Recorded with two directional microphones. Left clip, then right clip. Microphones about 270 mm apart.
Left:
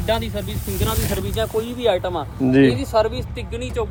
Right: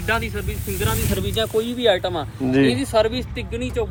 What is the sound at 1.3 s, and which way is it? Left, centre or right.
Speech, right.